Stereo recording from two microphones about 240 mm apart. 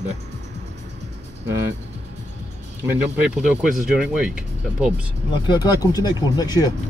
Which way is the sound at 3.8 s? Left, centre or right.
Centre.